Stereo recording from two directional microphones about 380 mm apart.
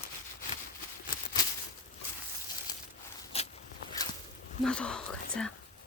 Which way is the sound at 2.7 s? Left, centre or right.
Centre.